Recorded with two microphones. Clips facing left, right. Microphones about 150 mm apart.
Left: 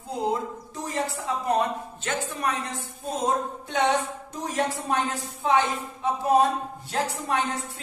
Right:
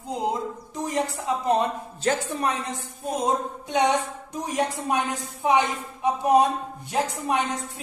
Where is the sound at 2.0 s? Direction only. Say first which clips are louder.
Right 6 dB; 35° right (ahead or behind).